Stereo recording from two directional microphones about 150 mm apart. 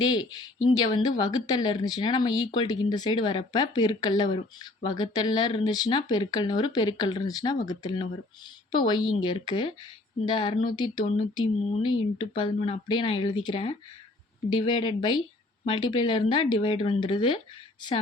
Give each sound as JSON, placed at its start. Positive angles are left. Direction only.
{"t": 0.0, "sound": "a woman's voice", "side_deg": 25}